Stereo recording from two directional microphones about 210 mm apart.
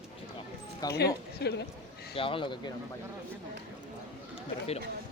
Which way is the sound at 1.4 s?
50° left (ahead or behind).